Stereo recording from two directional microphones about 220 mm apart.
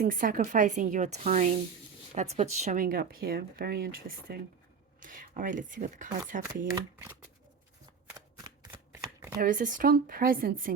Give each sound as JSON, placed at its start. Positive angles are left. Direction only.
{"t": 0.0, "sound": "speech", "side_deg": -40}
{"t": 6.5, "sound": "speech", "side_deg": -15}
{"t": 8.4, "sound": "shuffling cards", "side_deg": -20}
{"t": 9.4, "sound": "speech", "side_deg": -40}